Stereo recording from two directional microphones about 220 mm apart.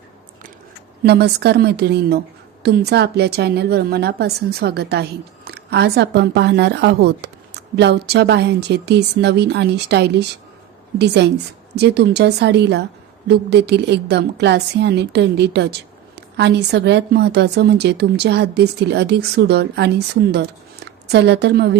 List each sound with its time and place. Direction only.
1.0 s a woman's voice: 50° right (ahead or behind)